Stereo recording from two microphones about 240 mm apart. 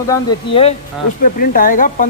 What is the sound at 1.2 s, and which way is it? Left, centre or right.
Speech, left.